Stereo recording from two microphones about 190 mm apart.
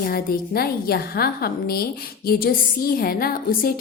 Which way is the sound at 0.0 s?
50° left (ahead or behind).